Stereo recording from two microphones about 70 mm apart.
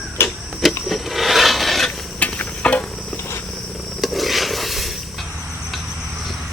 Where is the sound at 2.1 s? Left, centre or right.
Centre.